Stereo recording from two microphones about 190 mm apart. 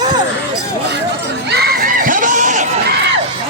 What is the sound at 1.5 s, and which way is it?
Crowd, 55° right (ahead or behind).